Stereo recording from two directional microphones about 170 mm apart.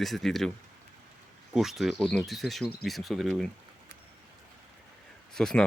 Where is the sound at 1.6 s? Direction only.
Centre (ahead or behind).